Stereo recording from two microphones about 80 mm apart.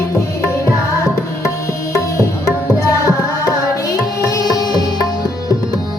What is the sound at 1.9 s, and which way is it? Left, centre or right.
Music, left.